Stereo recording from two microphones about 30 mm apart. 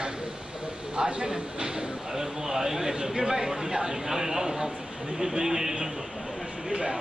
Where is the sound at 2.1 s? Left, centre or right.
Centre.